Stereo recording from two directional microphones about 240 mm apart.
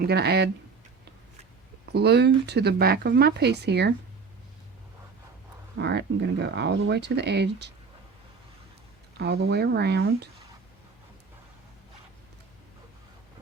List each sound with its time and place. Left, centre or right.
0.0 s speech: right
1.9 s speech: right
5.7 s speech: right
9.1 s speech: right